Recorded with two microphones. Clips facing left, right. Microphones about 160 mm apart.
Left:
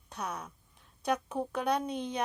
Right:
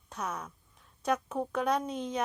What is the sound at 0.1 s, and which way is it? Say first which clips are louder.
A woman's voice: right 1 dB; 30° left (ahead or behind).